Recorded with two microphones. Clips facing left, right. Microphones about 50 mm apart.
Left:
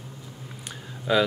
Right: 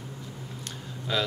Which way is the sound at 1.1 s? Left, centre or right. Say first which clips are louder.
Left 7 dB; centre.